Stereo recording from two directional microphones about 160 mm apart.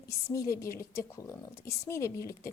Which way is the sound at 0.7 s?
15° left (ahead or behind).